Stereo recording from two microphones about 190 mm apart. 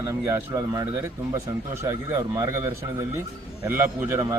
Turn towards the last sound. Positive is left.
turn(degrees=-10)  # may be behind; listen again after turning